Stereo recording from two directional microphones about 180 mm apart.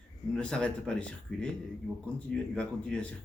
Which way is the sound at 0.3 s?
5° left (ahead or behind).